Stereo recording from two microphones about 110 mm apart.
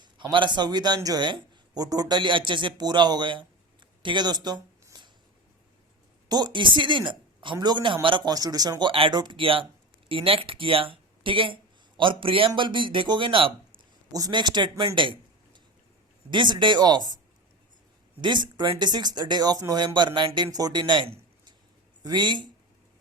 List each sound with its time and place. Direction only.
0.0 s speech: 45° right (ahead or behind)
4.0 s a sound: 45° right (ahead or behind)
6.2 s speech: 40° right (ahead or behind)
8.9 s speech: 50° right (ahead or behind)
14.1 s a man's voice: 40° right (ahead or behind)
18.2 s speech: 45° right (ahead or behind)